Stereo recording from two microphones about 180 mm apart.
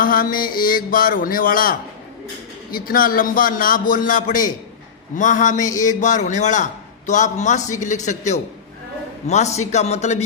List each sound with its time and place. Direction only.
0.0 s speech: 50° left (ahead or behind)
2.7 s a man's voice: 55° left (ahead or behind); by 10.2 s 40° left (ahead or behind)